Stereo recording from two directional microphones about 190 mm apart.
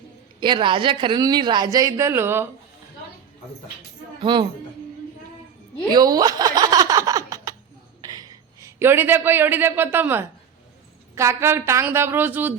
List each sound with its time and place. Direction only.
0.3 s speech: 25° right (ahead or behind)
4.2 s speech: 25° right (ahead or behind)
5.9 s a sound: 20° right (ahead or behind)
8.0 s a man's voice: 20° right (ahead or behind)